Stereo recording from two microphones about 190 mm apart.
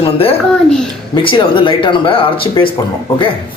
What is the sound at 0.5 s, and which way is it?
Speech, 5° left (ahead or behind).